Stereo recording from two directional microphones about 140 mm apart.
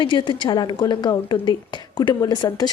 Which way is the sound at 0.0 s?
35° left (ahead or behind).